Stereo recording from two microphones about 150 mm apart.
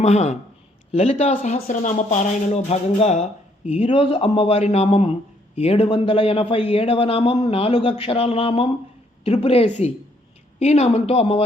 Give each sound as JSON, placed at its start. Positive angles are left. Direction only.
{"t": 0.0, "sound": "a man's voice", "side_deg": 50}
{"t": 3.9, "sound": "a man's voice", "side_deg": 40}